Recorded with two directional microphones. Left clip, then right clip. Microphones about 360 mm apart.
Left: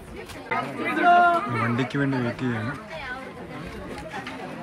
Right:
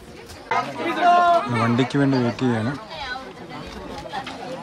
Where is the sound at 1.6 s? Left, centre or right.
Centre.